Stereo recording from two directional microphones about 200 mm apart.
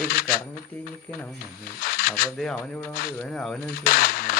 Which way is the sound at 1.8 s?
45° left (ahead or behind).